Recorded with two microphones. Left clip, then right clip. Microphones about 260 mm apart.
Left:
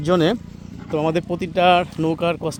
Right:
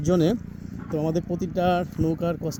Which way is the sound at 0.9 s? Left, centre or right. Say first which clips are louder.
Left 6 dB; left.